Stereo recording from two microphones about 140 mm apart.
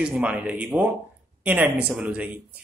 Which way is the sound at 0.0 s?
10° right (ahead or behind).